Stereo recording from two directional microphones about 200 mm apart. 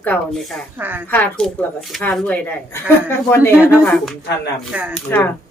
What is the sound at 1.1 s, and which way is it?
A woman's voice, 5° left (ahead or behind).